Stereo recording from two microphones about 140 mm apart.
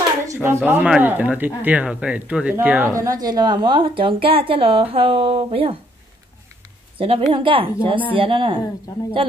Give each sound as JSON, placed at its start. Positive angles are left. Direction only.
{"t": 0.3, "sound": "a sound", "side_deg": -15}
{"t": 0.7, "sound": "speech", "side_deg": -10}
{"t": 2.9, "sound": "a woman's voice", "side_deg": -25}
{"t": 7.0, "sound": "a woman's voice", "side_deg": -40}